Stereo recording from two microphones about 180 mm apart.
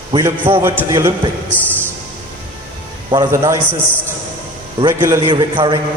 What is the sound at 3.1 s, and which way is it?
Music, 20° right (ahead or behind).